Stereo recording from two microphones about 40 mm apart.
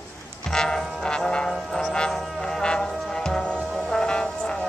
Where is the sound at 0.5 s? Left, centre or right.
Centre.